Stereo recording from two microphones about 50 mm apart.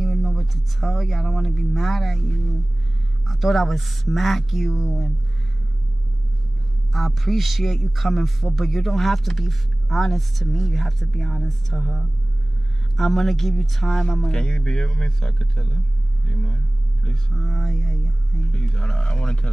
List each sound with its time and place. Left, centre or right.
0.0 s speech: centre
3.3 s a man's voice: centre
6.9 s a man's voice: centre
16.3 s vehicle: centre
17.3 s a man's voice: centre
18.7 s speech: centre